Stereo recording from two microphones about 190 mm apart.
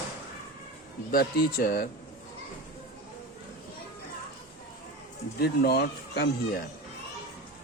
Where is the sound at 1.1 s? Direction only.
55° left (ahead or behind).